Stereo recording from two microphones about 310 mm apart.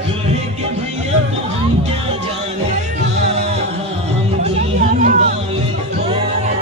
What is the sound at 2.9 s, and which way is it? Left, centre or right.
Music, right.